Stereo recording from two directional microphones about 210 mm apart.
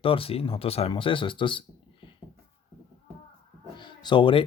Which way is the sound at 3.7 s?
20° left (ahead or behind).